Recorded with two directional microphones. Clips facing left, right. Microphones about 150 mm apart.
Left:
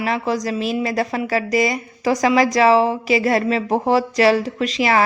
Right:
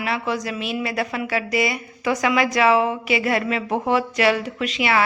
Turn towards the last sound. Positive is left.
turn(degrees=35)  # may be behind; listen again after turning